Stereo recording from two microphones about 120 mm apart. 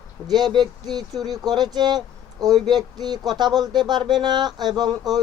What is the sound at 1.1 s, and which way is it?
Speech, centre (ahead or behind).